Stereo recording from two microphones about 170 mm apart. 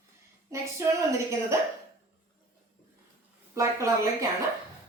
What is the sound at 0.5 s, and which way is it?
A woman's voice, 15° right (ahead or behind).